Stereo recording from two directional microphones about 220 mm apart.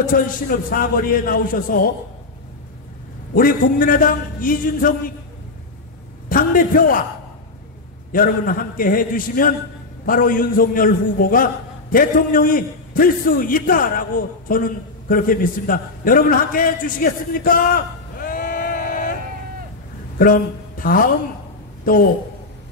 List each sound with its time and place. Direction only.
0.1 s a man's voice: 40° left (ahead or behind)
3.3 s a man's voice: 40° left (ahead or behind)
6.2 s a man's voice: 40° left (ahead or behind)
8.1 s a man's voice: 40° left (ahead or behind)